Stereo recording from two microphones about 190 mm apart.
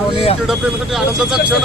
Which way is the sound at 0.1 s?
30° left (ahead or behind).